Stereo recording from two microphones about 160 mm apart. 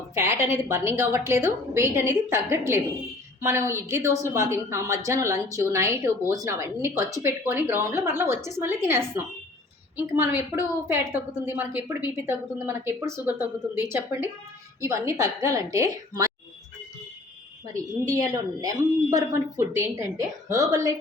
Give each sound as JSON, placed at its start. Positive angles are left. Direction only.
{"t": 0.1, "sound": "a woman's voice", "side_deg": -15}
{"t": 18.0, "sound": "speech", "side_deg": -25}